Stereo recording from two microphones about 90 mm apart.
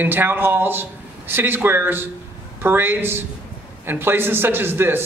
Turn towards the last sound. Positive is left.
turn(degrees=-25)  # may be behind; listen again after turning